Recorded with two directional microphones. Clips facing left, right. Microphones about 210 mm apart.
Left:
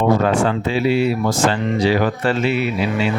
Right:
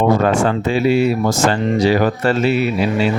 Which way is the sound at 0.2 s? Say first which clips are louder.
Right 2 dB; 45° right (ahead or behind).